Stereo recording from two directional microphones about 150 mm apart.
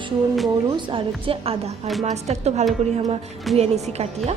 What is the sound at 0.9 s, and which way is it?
A woman's voice, 35° right (ahead or behind).